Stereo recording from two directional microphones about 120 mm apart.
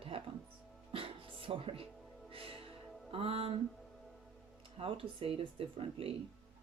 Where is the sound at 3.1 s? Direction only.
50° right (ahead or behind).